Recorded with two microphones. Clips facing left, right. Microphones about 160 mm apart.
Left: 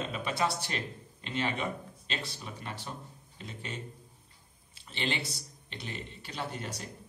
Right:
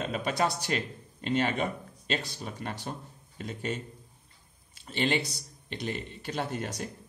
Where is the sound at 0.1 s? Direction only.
40° right (ahead or behind).